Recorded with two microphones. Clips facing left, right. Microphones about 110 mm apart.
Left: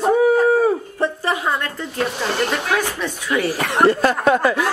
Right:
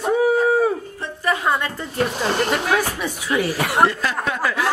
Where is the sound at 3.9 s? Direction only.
40° left (ahead or behind).